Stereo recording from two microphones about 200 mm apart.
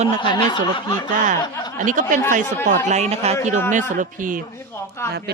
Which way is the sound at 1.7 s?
40° right (ahead or behind).